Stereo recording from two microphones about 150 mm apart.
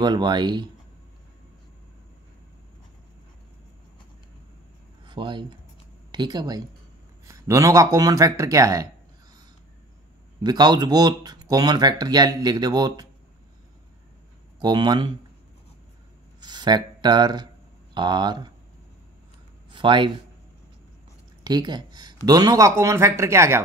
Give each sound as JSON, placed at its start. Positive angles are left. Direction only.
{"t": 0.0, "sound": "speech", "side_deg": -30}
{"t": 5.0, "sound": "speech", "side_deg": -30}
{"t": 10.4, "sound": "speech", "side_deg": -25}
{"t": 14.6, "sound": "speech", "side_deg": -30}
{"t": 16.3, "sound": "speech", "side_deg": -30}
{"t": 19.7, "sound": "a man's voice", "side_deg": -30}
{"t": 21.5, "sound": "speech", "side_deg": -30}